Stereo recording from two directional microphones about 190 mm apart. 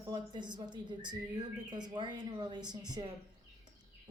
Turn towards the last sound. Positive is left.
turn(degrees=-20)  # may be behind; listen again after turning